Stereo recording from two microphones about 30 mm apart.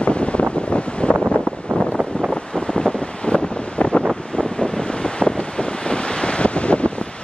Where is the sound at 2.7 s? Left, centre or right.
Left.